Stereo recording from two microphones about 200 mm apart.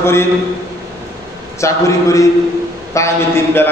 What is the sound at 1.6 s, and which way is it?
A man's voice, 15° left (ahead or behind).